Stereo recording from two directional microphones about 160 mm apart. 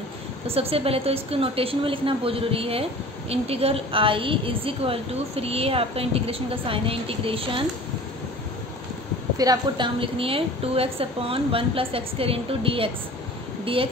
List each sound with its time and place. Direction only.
0.5 s a woman's voice: 35° right (ahead or behind)
9.4 s a woman's voice: 25° right (ahead or behind)